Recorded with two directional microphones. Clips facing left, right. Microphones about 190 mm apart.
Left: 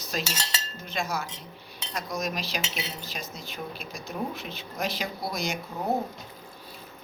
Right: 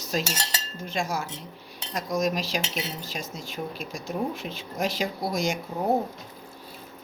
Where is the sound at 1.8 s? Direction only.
45° right (ahead or behind).